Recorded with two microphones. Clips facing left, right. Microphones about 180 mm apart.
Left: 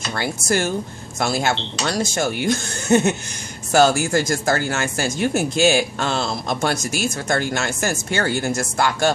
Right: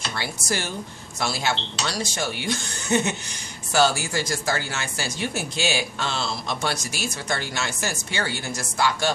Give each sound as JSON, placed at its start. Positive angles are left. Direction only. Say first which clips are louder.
{"t": 0.1, "sound": "speech", "louder": "left 9 dB", "side_deg": 50}